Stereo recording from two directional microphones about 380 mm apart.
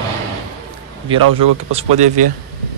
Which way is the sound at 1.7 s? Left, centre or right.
Centre.